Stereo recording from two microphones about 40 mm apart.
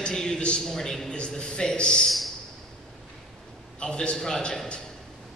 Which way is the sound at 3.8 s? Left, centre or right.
Left.